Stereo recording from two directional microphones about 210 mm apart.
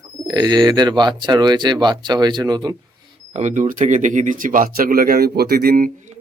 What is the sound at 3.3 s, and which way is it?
Speech, 35° right (ahead or behind).